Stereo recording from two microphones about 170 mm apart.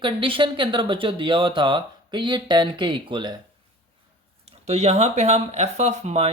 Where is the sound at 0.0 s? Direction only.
30° right (ahead or behind).